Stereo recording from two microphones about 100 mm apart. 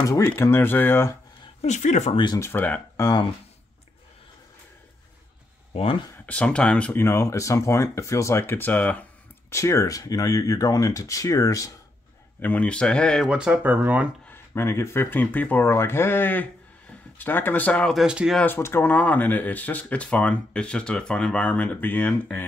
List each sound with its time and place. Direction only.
0.2 s speech: 25° left (ahead or behind)
1.6 s speech: 90° left
2.3 s speech: 25° left (ahead or behind)
3.0 s speech: 40° left (ahead or behind)
5.7 s speech: 65° left (ahead or behind)
6.2 s speech: 10° left (ahead or behind)
6.9 s speech: 25° left (ahead or behind)
9.5 s speech: 30° left (ahead or behind)
12.4 s speech: 15° left (ahead or behind)
13.2 s speech: 10° right (ahead or behind)
14.3 s speech: 25° left (ahead or behind)
17.9 s speech: 5° right (ahead or behind)
18.4 s speech: 20° left (ahead or behind)